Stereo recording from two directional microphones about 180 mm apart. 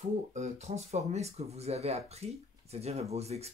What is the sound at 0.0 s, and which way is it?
Speech, 40° right (ahead or behind).